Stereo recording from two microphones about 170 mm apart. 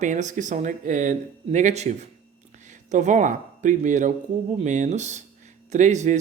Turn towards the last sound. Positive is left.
turn(degrees=-45)  # may be behind; listen again after turning